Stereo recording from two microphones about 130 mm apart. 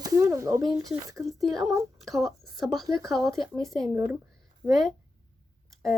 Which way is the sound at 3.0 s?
Centre (ahead or behind).